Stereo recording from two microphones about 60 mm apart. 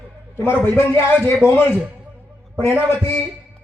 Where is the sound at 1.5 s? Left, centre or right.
Left.